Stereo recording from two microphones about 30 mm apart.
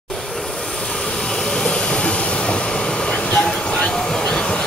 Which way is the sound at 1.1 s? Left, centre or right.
Centre.